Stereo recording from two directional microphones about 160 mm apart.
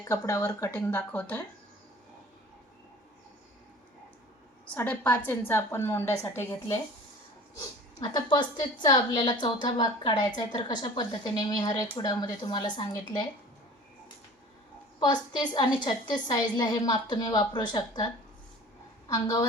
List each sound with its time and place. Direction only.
0.0 s a woman's voice: 20° left (ahead or behind)
4.7 s a woman's voice: 10° left (ahead or behind); by 12.9 s 30° left (ahead or behind)
14.9 s a woman's voice: 30° left (ahead or behind)